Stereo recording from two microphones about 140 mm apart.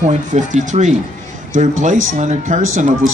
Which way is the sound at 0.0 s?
60° right (ahead or behind).